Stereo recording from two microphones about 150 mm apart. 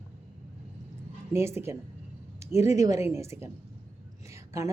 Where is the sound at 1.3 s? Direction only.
15° right (ahead or behind).